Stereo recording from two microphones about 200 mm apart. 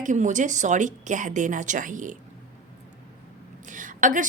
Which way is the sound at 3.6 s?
40° right (ahead or behind).